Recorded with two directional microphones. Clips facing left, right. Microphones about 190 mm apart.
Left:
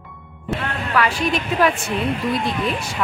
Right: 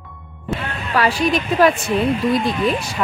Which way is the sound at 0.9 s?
35° right (ahead or behind).